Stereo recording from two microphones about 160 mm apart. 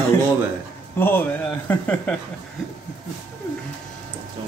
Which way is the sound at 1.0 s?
15° left (ahead or behind).